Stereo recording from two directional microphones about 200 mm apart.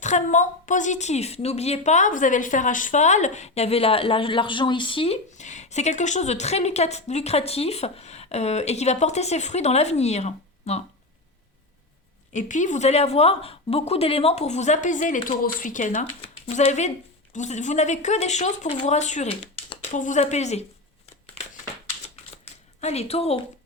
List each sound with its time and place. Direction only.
0.0 s a woman's voice: 40° left (ahead or behind)
12.3 s a woman's voice: 40° left (ahead or behind)
22.8 s a woman's voice: 30° left (ahead or behind)